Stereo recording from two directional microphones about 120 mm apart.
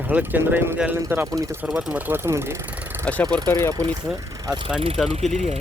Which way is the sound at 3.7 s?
35° right (ahead or behind).